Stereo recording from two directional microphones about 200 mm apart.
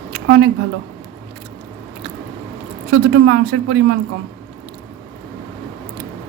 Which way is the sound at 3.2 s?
65° right (ahead or behind).